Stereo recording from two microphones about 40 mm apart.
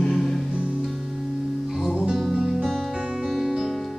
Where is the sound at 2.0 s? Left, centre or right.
Centre.